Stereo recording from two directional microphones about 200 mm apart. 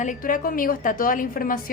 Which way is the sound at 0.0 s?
40° left (ahead or behind).